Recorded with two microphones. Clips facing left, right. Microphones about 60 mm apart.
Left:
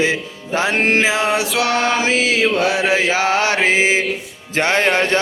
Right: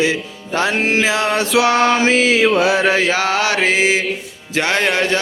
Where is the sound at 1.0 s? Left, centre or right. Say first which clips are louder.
Even; left.